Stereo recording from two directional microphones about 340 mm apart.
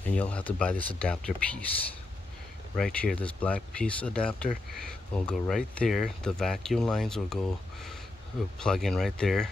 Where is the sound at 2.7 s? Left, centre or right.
Centre.